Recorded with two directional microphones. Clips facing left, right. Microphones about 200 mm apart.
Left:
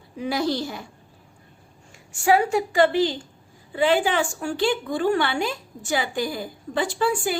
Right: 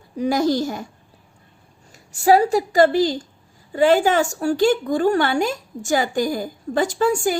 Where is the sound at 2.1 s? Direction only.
35° right (ahead or behind).